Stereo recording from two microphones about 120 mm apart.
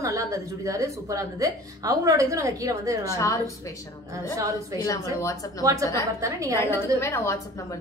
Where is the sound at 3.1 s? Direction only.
25° left (ahead or behind).